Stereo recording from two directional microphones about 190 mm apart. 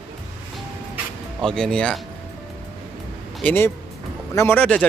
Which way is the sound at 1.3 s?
5° left (ahead or behind).